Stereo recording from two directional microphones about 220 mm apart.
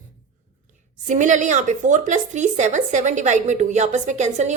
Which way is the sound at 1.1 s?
35° right (ahead or behind).